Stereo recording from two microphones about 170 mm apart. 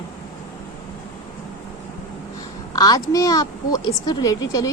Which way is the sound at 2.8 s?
20° left (ahead or behind).